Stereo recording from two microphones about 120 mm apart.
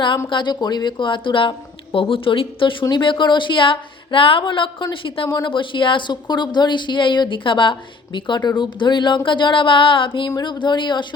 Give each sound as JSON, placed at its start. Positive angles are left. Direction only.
{"t": 0.3, "sound": "speech", "side_deg": 40}